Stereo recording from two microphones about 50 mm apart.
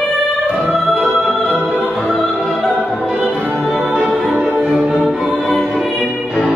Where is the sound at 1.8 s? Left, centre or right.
Centre.